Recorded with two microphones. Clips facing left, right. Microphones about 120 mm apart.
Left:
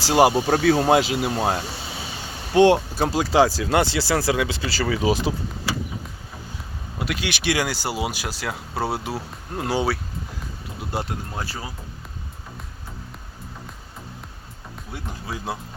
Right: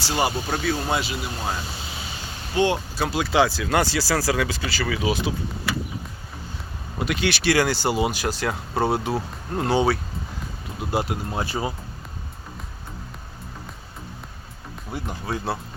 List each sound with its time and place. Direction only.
0.0 s speech: 90° left
0.6 s speech: 80° left
3.0 s speech: 35° left (ahead or behind)
7.0 s speech: centre (ahead or behind)
7.3 s speech: 15° left (ahead or behind); by 11.2 s 5° right (ahead or behind)
11.3 s speech: 20° right (ahead or behind)